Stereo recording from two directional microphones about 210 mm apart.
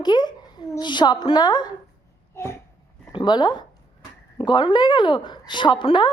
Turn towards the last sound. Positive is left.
turn(degrees=20)  # may be behind; listen again after turning